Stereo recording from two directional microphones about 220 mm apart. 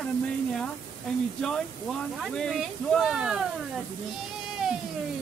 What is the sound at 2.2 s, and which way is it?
Speech, centre (ahead or behind).